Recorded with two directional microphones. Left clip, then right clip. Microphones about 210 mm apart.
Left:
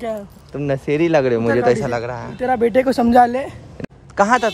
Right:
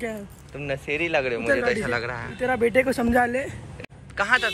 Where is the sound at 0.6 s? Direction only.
50° left (ahead or behind).